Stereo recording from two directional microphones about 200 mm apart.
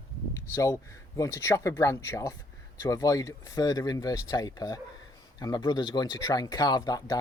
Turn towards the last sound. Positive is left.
turn(degrees=20)  # may be behind; listen again after turning